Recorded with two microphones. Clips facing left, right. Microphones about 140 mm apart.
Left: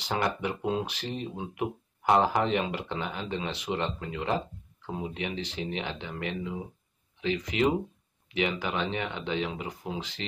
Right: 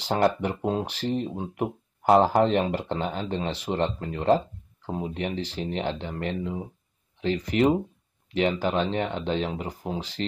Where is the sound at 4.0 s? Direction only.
40° right (ahead or behind).